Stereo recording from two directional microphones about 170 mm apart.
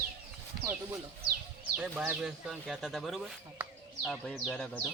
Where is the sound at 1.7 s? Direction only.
10° right (ahead or behind).